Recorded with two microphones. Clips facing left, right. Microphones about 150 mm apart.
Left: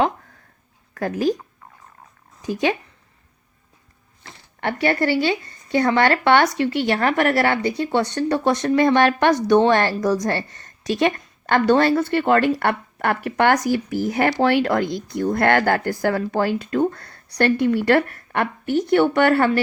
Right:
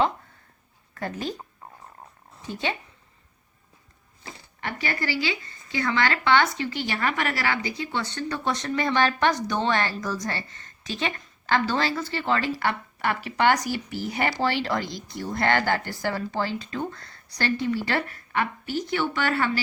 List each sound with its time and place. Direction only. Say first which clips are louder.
0.9 s speech: left 10 dB; 75° left (ahead or behind)
2.4 s speech: left 9 dB; 85° left
4.6 s a woman's voice: left 10 dB; 60° left (ahead or behind)
11.4 s a woman's voice: left 8 dB; 60° left (ahead or behind)